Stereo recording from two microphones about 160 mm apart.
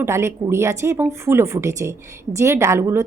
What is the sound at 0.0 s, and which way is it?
Speech, 15° right (ahead or behind).